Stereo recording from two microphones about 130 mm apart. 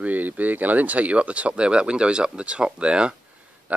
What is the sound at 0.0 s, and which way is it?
Speech, 15° right (ahead or behind).